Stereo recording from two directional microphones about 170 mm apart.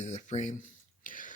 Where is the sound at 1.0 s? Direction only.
50° left (ahead or behind).